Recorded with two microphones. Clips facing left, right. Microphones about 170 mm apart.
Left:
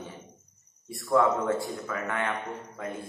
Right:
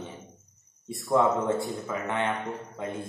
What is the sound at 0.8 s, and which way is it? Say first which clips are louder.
A man's voice: even; 20° right (ahead or behind).